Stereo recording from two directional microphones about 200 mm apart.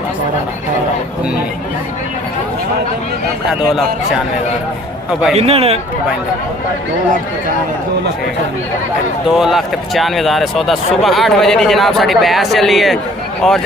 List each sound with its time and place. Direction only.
5.3 s a man's voice: 30° right (ahead or behind)
9.4 s speech: centre (ahead or behind)